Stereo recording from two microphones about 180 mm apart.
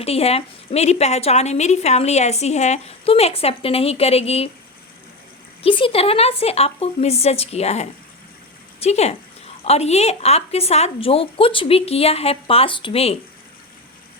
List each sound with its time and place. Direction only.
0.0 s a woman's voice: 35° left (ahead or behind)
5.6 s a woman's voice: 30° left (ahead or behind)